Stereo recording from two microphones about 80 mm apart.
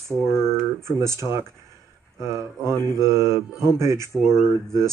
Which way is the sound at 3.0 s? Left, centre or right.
Right.